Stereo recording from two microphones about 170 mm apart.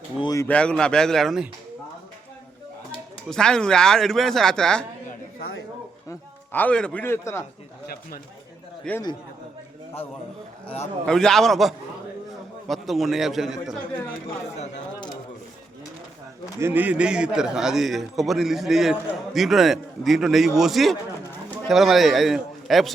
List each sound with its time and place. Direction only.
0.2 s speech: 20° left (ahead or behind)
0.4 s a man's voice: 5° left (ahead or behind)
3.2 s a man's voice: 5° left (ahead or behind)
6.1 s a man's voice: 10° left (ahead or behind)
8.9 s a man's voice: 5° left (ahead or behind)
11.0 s a man's voice: 5° left (ahead or behind)
16.6 s a man's voice: 10° right (ahead or behind)